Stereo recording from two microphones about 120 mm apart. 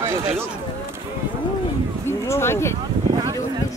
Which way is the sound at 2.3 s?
20° left (ahead or behind).